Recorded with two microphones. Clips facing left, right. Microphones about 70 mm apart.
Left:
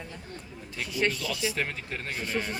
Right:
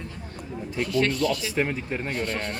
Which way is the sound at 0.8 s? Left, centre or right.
Centre.